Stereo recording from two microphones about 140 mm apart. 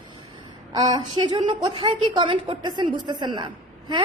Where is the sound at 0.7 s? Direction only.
30° right (ahead or behind).